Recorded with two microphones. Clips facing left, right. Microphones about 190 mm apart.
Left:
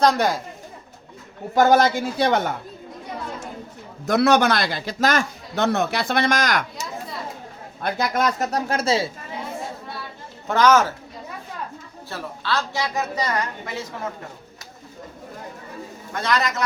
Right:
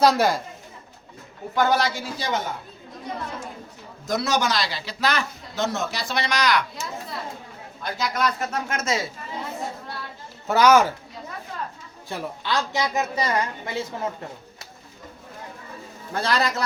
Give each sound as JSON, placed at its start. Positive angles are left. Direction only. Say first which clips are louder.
{"t": 0.0, "sound": "speech", "louder": "even", "side_deg": 0}
{"t": 1.5, "sound": "a man's voice", "louder": "left 6 dB", "side_deg": 45}
{"t": 4.0, "sound": "a man's voice", "louder": "left 7 dB", "side_deg": 65}
{"t": 7.8, "sound": "a man's voice", "louder": "left 3 dB", "side_deg": 55}
{"t": 10.5, "sound": "a man's voice", "louder": "even", "side_deg": -10}
{"t": 12.0, "sound": "a man's voice", "louder": "even", "side_deg": -15}
{"t": 16.1, "sound": "a man's voice", "louder": "even", "side_deg": -30}